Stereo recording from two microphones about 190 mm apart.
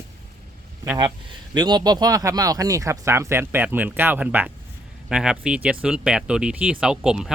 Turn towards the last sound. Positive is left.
turn(degrees=-5)  # may be behind; listen again after turning